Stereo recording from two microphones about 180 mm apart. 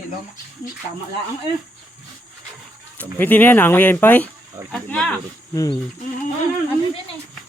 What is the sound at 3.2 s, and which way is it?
Speech, 10° left (ahead or behind).